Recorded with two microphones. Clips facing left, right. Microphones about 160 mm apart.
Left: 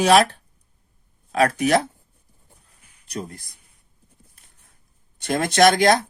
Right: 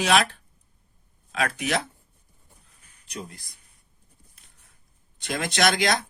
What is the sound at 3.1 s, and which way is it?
Speech, 40° left (ahead or behind).